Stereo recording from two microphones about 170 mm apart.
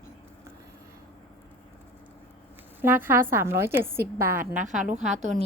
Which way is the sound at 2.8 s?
10° right (ahead or behind).